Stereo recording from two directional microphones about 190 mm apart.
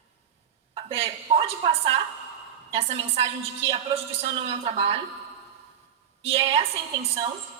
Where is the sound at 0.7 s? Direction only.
30° right (ahead or behind).